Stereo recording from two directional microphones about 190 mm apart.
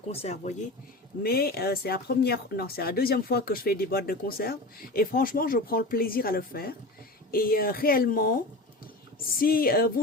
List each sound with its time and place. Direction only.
0.1 s speech: 35° left (ahead or behind)
1.2 s speech: 50° left (ahead or behind)